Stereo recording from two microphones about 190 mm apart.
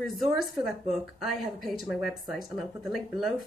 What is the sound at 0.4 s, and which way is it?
Speech, centre (ahead or behind).